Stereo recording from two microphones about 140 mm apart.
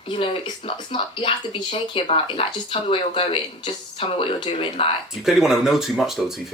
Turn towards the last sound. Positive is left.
turn(degrees=0)  # may be behind; listen again after turning